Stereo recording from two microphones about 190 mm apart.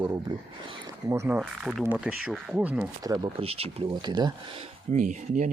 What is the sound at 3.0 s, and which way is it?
Speech, 20° right (ahead or behind).